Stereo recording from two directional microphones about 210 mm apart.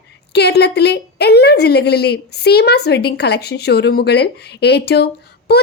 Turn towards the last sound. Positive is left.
turn(degrees=50)  # may be behind; listen again after turning